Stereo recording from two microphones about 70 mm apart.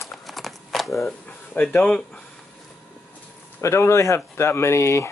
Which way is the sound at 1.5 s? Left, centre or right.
Left.